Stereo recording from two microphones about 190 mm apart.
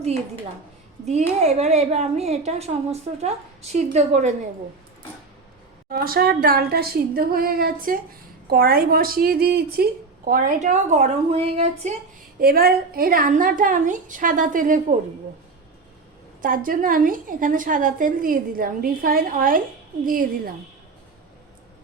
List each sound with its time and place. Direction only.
1.0 s a woman's voice: 35° right (ahead or behind)
5.9 s a woman's voice: 50° right (ahead or behind); by 11.7 s 30° right (ahead or behind)
12.4 s a woman's voice: 50° right (ahead or behind)
16.4 s a woman's voice: 45° right (ahead or behind)